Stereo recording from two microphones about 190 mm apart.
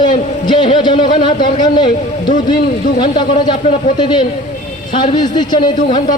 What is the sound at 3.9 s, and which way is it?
Speech, 25° left (ahead or behind).